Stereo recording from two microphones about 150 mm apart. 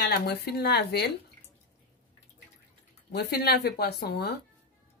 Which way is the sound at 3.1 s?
90° left.